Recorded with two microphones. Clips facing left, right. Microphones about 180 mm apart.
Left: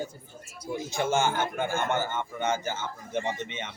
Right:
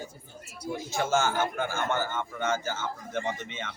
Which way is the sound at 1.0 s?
15° left (ahead or behind).